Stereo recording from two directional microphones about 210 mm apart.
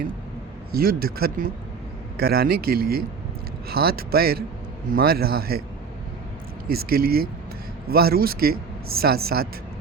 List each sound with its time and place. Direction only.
0.7 s speech: 45° right (ahead or behind)
6.7 s speech: 45° right (ahead or behind)